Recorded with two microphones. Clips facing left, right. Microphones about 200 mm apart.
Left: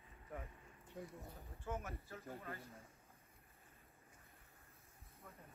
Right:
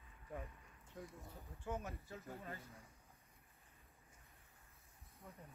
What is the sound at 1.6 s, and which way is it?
Speech, 15° right (ahead or behind).